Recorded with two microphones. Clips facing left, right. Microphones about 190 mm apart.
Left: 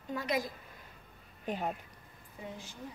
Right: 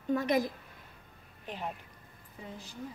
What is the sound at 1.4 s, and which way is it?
Speech, 45° left (ahead or behind).